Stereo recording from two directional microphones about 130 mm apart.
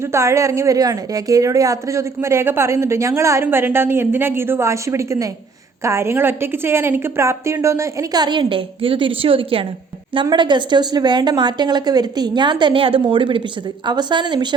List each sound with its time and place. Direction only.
0.0 s a woman's voice: 20° right (ahead or behind)